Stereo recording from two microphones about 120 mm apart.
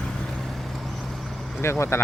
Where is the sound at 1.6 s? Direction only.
20° left (ahead or behind).